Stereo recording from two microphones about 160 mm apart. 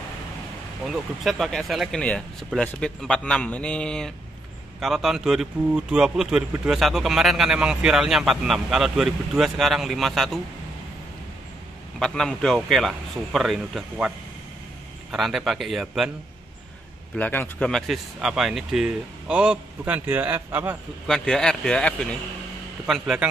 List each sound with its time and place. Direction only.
0.8 s speech: centre (ahead or behind)
12.0 s speech: 5° left (ahead or behind)
17.1 s speech: 10° left (ahead or behind); by 20.7 s 15° right (ahead or behind)
21.1 s speech: 5° left (ahead or behind)